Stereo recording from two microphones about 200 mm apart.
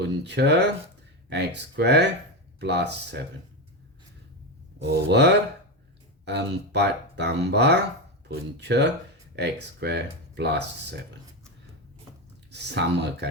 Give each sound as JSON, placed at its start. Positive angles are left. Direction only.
{"t": 0.0, "sound": "speech", "side_deg": -60}
{"t": 4.8, "sound": "speech", "side_deg": -55}
{"t": 12.5, "sound": "speech", "side_deg": -60}